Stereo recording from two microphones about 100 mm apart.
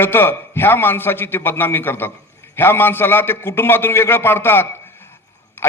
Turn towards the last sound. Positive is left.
turn(degrees=25)  # may be behind; listen again after turning